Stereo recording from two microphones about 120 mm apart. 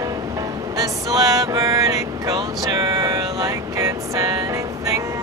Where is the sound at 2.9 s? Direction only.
25° right (ahead or behind).